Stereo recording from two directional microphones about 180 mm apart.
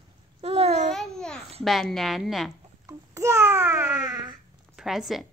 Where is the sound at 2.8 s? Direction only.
15° right (ahead or behind).